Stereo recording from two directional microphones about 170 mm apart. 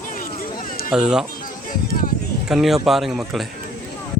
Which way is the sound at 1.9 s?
60° left (ahead or behind).